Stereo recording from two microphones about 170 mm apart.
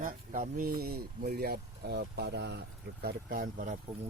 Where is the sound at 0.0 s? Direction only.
55° right (ahead or behind); by 2.6 s 80° right.